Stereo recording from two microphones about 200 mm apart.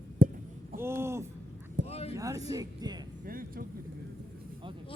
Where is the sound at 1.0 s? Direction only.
15° right (ahead or behind).